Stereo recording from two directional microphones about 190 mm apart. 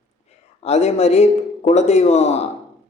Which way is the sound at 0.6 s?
35° left (ahead or behind).